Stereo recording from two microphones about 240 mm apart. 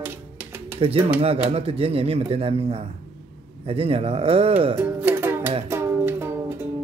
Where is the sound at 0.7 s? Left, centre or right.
Right.